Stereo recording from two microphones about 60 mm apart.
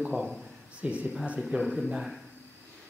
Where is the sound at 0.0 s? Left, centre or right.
Centre.